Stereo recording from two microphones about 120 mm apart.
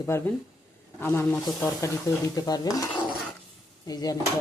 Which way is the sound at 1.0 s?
20° left (ahead or behind).